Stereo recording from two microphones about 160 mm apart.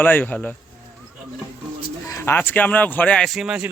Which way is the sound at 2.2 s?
15° left (ahead or behind).